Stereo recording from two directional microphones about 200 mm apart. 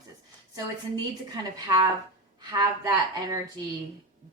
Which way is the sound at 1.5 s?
20° right (ahead or behind).